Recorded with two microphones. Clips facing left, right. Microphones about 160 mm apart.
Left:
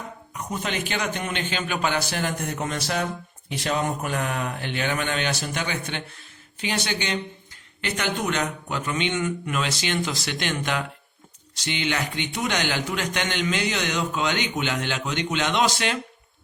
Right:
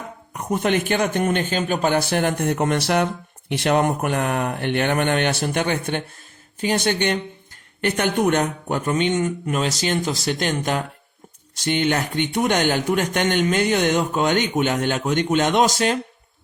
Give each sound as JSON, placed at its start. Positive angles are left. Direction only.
{"t": 0.3, "sound": "speech", "side_deg": -55}